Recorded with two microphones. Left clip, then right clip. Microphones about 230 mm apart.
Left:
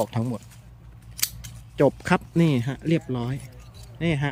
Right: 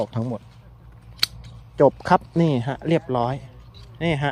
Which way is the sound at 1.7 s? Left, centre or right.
Centre.